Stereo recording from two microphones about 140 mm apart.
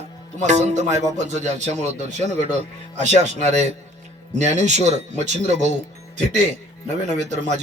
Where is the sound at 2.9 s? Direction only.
55° right (ahead or behind).